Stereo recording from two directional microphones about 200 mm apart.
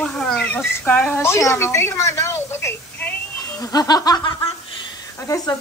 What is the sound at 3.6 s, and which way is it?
Snicker, 20° left (ahead or behind).